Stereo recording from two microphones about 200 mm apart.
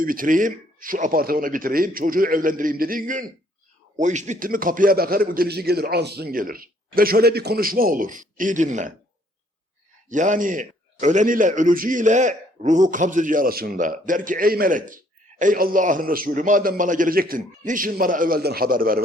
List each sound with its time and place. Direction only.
0.0 s a man's voice: 45° right (ahead or behind)
10.1 s a man's voice: 40° right (ahead or behind)